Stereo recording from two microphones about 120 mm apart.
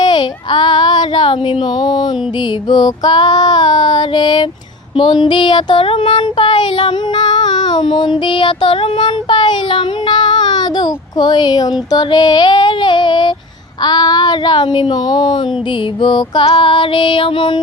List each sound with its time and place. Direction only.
0.0 s speech: 35° left (ahead or behind)
2.6 s child singing: 35° left (ahead or behind)
16.0 s female singing: 40° left (ahead or behind)